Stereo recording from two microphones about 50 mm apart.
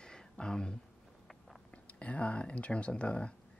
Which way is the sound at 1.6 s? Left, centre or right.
Left.